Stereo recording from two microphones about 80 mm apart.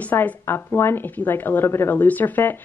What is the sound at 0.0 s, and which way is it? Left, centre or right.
Speech, centre.